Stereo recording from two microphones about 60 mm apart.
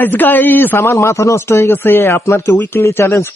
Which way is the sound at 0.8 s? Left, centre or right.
Left.